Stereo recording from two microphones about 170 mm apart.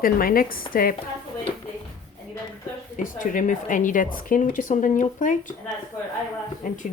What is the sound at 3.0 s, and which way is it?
Speech, 50° left (ahead or behind).